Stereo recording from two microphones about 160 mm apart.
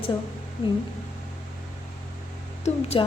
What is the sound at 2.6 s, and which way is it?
Speech, 40° left (ahead or behind).